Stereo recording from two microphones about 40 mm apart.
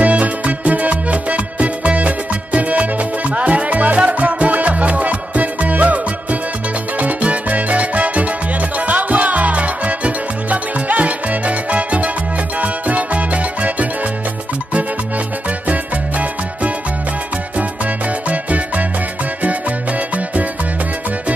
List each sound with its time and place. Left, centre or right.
0.0 s music: right
7.0 s music: right
15.7 s music: right
18.3 s music: right